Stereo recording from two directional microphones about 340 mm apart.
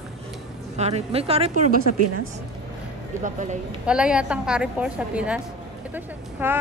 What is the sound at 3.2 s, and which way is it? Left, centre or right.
Speech, right.